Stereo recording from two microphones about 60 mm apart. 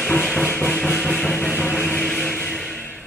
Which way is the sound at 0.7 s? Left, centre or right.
Centre.